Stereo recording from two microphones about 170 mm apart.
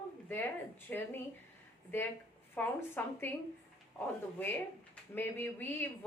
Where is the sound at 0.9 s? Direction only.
10° left (ahead or behind).